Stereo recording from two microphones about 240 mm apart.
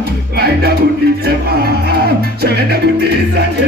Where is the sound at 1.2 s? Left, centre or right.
Right.